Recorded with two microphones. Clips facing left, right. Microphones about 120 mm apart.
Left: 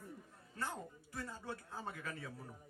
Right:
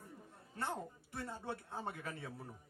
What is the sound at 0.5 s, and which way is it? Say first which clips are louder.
Speech: right 2 dB; 25° right (ahead or behind).